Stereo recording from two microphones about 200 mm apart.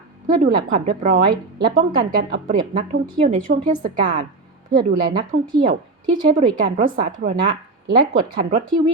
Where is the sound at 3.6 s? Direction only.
40° right (ahead or behind).